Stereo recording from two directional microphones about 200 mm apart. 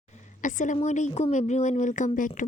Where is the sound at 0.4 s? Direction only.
40° left (ahead or behind).